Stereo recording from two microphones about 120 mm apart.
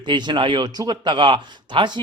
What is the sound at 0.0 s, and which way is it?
A man's voice, 40° right (ahead or behind).